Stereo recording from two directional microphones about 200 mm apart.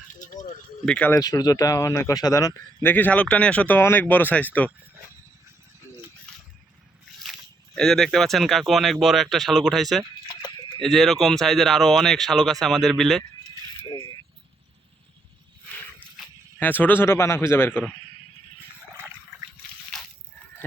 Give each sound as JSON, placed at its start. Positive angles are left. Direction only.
{"t": 0.1, "sound": "a sound", "side_deg": 40}
{"t": 0.9, "sound": "speech", "side_deg": 10}
{"t": 7.8, "sound": "speech", "side_deg": 0}
{"t": 16.6, "sound": "speech", "side_deg": 10}